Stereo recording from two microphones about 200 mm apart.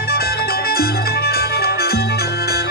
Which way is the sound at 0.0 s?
50° left (ahead or behind).